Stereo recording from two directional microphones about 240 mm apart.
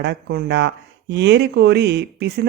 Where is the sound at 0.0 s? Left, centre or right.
Right.